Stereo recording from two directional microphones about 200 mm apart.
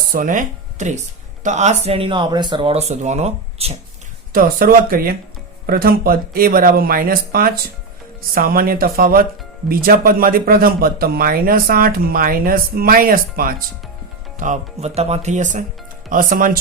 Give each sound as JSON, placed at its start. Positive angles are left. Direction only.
{"t": 0.1, "sound": "speech", "side_deg": -40}
{"t": 4.3, "sound": "speech", "side_deg": -45}